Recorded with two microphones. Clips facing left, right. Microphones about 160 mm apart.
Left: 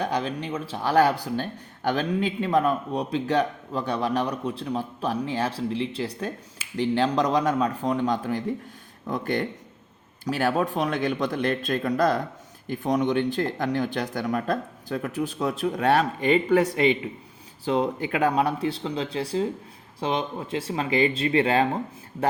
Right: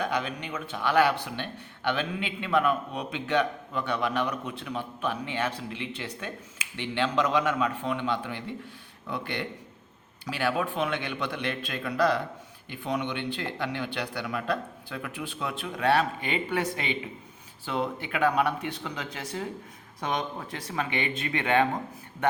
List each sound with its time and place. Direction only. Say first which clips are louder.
0.0 s speech: left 3 dB; 35° left (ahead or behind)